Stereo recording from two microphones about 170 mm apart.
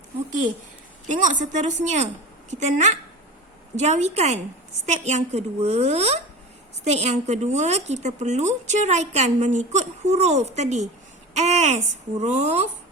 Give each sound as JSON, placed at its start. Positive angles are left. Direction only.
{"t": 1.0, "sound": "a woman's voice", "side_deg": -50}